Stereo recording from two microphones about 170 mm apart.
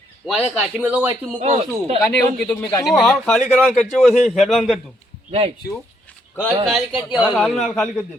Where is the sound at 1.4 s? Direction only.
40° right (ahead or behind).